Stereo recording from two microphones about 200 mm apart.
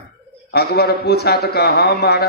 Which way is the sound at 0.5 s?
55° left (ahead or behind).